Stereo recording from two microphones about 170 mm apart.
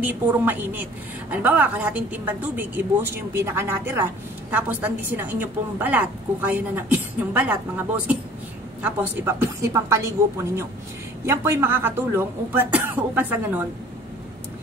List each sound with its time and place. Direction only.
0.0 s a woman's voice: 10° right (ahead or behind)